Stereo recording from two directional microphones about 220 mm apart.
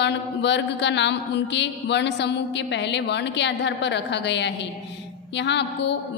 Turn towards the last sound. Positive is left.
turn(degrees=50)  # may be behind; listen again after turning